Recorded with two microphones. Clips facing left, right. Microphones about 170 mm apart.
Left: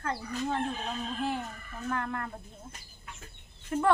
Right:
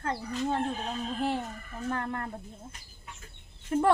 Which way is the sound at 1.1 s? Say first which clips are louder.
Right 4 dB; 30° right (ahead or behind).